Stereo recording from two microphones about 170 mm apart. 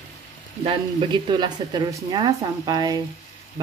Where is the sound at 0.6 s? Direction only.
30° right (ahead or behind).